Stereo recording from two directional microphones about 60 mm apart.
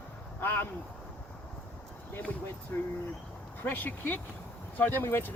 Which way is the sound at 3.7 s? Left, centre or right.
Left.